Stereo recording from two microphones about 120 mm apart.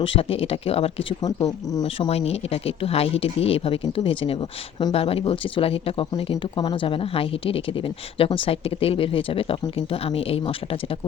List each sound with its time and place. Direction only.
0.0 s speech: 50° left (ahead or behind)
1.2 s speech: 30° left (ahead or behind)
2.0 s speech: 60° left (ahead or behind); by 4.9 s 40° left (ahead or behind)
4.9 s speech: 55° left (ahead or behind)